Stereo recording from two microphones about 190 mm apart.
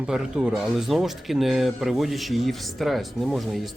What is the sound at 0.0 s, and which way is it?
Speech, 5° right (ahead or behind).